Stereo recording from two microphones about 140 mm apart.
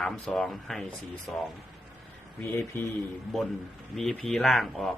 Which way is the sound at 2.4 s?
15° left (ahead or behind).